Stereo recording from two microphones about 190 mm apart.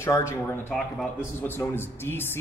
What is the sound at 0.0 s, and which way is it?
Speech, 15° left (ahead or behind).